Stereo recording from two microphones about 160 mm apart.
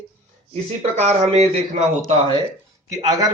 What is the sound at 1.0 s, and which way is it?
Speech, 40° right (ahead or behind).